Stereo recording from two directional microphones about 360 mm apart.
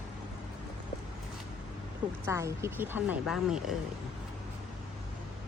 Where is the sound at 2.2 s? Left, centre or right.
Centre.